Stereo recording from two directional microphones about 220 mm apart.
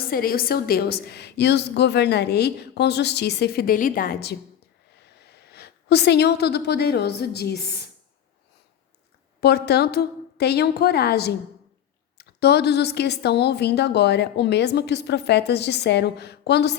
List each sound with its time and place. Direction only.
0.1 s a woman's voice: 40° left (ahead or behind)
9.4 s a woman's voice: 50° left (ahead or behind)